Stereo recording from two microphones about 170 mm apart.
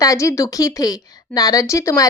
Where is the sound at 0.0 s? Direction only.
20° left (ahead or behind).